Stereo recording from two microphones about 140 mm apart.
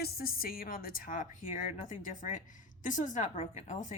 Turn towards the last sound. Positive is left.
turn(degrees=60)  # may be behind; listen again after turning